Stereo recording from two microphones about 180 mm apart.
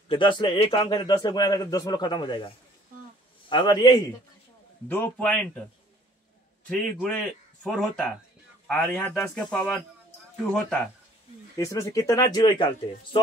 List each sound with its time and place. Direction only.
0.1 s speech: 25° left (ahead or behind)
4.8 s a man's voice: 10° left (ahead or behind)
6.7 s speech: 5° left (ahead or behind)
11.5 s speech: 15° left (ahead or behind)